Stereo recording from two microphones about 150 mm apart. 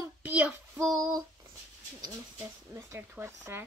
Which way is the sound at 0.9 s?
25° right (ahead or behind).